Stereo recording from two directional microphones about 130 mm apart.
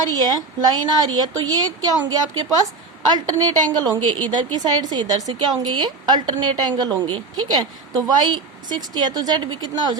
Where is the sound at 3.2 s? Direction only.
30° right (ahead or behind).